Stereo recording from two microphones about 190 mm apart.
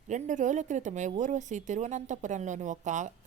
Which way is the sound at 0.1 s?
40° right (ahead or behind).